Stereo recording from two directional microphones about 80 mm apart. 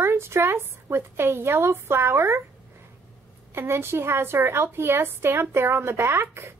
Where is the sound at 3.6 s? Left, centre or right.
Right.